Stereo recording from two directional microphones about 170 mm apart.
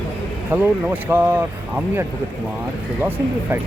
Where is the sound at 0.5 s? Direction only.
10° right (ahead or behind).